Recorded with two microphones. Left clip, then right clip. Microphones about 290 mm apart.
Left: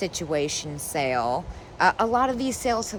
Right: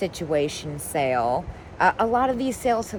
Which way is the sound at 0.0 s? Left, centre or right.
Centre.